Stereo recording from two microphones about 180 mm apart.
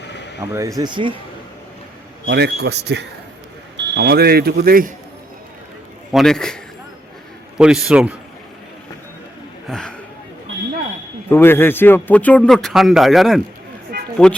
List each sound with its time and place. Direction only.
0.1 s a sound: 75° left (ahead or behind)
0.5 s speech: 20° right (ahead or behind)
2.2 s speech: 65° right (ahead or behind)
6.1 s a man's voice: centre (ahead or behind)
7.6 s a man's voice: 5° right (ahead or behind)
9.6 s speech: 5° left (ahead or behind)
11.3 s a man's voice: 10° left (ahead or behind)